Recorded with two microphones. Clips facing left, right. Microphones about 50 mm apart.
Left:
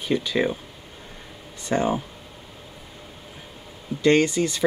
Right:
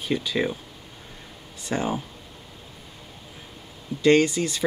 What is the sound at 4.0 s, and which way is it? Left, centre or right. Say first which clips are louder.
Speech: even; centre.